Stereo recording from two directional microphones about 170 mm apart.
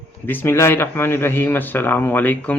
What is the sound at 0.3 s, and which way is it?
Speech, 15° left (ahead or behind).